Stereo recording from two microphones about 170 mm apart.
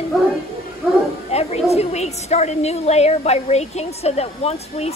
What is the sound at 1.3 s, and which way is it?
A woman's voice, 40° left (ahead or behind).